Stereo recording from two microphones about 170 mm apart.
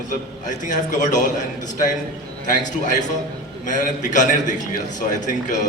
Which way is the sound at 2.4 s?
50° left (ahead or behind).